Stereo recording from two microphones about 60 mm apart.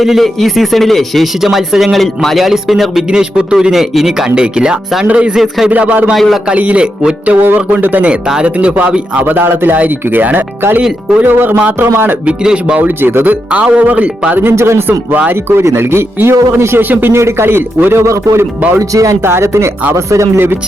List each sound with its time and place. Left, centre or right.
0.0 s speech: centre
3.1 s a man's voice: centre
6.1 s speech: centre
6.5 s a man's voice: right
7.3 s speech: right
8.3 s a man's voice: centre
12.2 s speech: centre
12.8 s a man's voice: right
14.3 s speech: right
15.1 s speech: right
18.0 s speech: right
19.2 s speech: right